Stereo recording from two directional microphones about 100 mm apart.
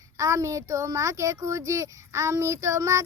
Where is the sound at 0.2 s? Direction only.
35° right (ahead or behind).